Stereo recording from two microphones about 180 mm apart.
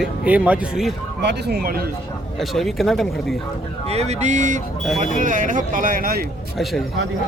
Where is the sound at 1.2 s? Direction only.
70° right (ahead or behind).